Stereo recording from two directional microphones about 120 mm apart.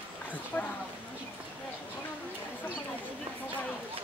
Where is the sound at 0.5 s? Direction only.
15° left (ahead or behind).